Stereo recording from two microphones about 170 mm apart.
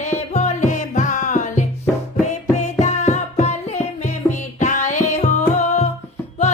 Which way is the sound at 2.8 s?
45° left (ahead or behind).